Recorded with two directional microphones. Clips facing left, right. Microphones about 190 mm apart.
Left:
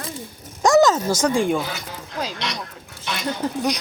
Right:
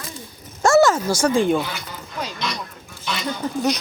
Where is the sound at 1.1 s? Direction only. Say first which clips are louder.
Right 2 dB; 15° left (ahead or behind).